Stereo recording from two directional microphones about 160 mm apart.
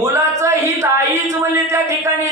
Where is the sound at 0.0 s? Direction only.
15° right (ahead or behind).